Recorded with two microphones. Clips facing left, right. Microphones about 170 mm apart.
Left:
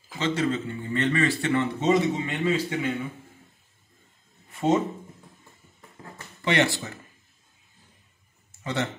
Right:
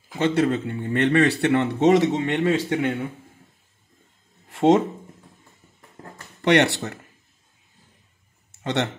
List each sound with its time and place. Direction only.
0.2 s speech: 60° right (ahead or behind); by 2.9 s 80° right
4.5 s a sound: 85° right
6.4 s speech: 70° right (ahead or behind)